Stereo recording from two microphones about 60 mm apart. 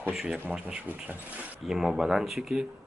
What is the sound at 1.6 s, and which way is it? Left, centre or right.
Speech, centre.